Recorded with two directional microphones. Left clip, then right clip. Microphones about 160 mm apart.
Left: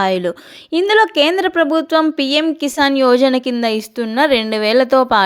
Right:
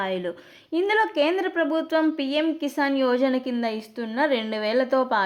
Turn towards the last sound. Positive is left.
turn(degrees=35)  # may be behind; listen again after turning